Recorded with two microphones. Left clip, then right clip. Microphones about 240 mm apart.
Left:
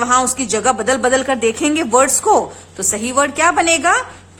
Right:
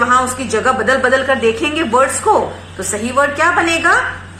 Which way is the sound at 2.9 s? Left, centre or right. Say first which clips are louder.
Right 2 dB; left.